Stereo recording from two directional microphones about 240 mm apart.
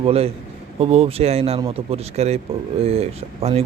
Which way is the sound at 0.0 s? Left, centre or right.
Right.